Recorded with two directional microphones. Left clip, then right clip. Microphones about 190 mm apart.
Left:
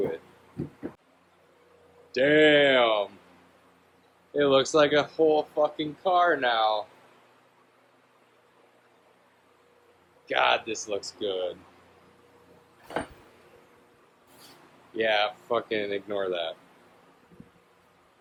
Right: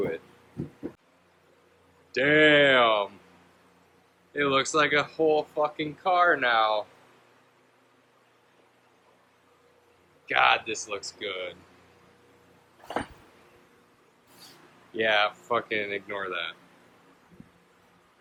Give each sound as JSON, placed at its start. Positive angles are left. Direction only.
{"t": 2.1, "sound": "a sound", "side_deg": 10}
{"t": 4.4, "sound": "speech", "side_deg": 20}
{"t": 10.2, "sound": "speech", "side_deg": 10}
{"t": 14.9, "sound": "speech", "side_deg": 5}